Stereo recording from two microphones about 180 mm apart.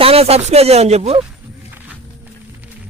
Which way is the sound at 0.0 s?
35° right (ahead or behind).